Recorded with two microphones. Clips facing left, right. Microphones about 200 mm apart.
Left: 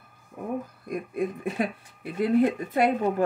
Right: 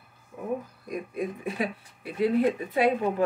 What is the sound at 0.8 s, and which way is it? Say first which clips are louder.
Speech: left 2 dB; 50° left (ahead or behind).